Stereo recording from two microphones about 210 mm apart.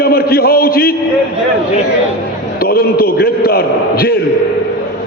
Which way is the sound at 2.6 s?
45° left (ahead or behind).